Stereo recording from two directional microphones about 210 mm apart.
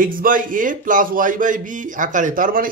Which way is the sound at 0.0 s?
40° right (ahead or behind).